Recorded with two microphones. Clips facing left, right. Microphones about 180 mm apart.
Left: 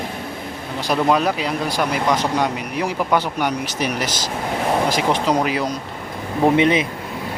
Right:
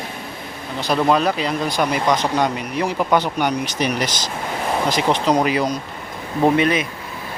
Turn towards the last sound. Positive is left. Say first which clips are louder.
# left 2 dB
turn(degrees=25)  # may be behind; listen again after turning